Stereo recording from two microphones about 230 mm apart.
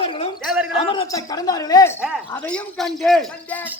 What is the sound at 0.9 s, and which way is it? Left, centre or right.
Speech, centre.